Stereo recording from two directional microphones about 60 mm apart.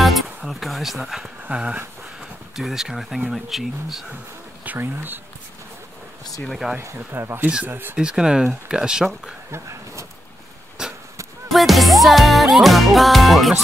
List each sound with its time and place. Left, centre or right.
0.5 s music: centre
1.5 s a sound: centre
2.5 s music: centre
4.7 s speech: right
6.6 s music: centre
7.1 s speech: right
7.9 s speech: centre
9.5 s speech: right
10.8 s arrow: centre
11.4 s music: centre